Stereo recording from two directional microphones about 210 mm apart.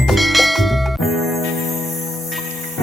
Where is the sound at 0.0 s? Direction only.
Centre (ahead or behind).